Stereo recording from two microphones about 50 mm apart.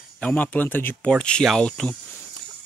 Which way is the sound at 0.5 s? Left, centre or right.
Left.